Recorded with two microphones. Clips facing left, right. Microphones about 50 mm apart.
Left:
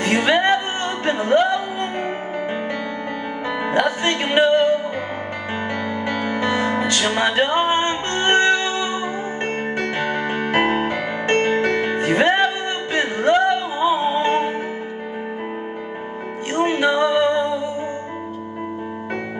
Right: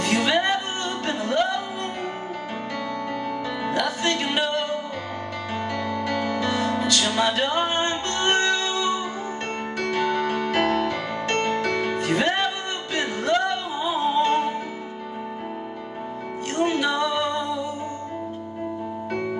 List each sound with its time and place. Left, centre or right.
0.0 s music: left
3.6 s music: left
6.0 s music: left
16.5 s music: left